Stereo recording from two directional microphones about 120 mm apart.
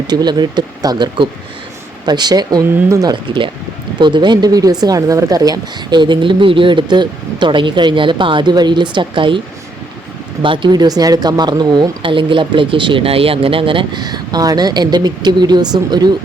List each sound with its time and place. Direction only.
0.1 s speech: 35° right (ahead or behind)
10.4 s speech: 45° right (ahead or behind)